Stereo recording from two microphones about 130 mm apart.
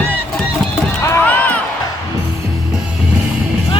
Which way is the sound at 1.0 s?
15° left (ahead or behind).